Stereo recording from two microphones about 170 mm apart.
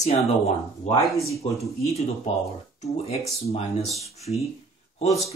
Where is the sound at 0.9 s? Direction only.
40° left (ahead or behind).